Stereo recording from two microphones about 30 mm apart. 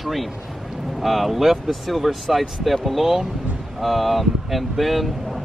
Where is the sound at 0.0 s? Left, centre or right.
Centre.